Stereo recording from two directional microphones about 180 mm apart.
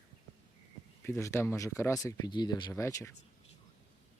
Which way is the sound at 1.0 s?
15° left (ahead or behind).